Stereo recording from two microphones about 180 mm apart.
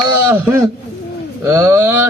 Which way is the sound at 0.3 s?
10° right (ahead or behind).